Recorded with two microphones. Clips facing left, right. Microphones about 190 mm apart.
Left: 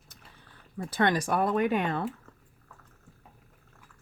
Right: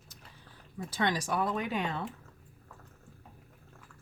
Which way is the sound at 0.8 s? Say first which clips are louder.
Left 5 dB; 55° left (ahead or behind).